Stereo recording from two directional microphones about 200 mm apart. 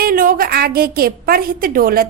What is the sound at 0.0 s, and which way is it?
A woman's voice, 45° right (ahead or behind).